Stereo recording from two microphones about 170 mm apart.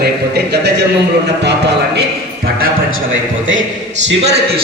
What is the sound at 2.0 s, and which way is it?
Speech, 65° right (ahead or behind).